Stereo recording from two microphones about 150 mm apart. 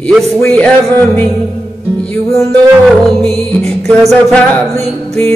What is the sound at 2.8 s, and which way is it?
Music, centre (ahead or behind).